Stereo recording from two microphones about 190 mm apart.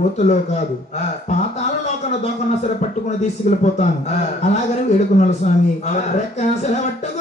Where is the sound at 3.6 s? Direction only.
40° left (ahead or behind).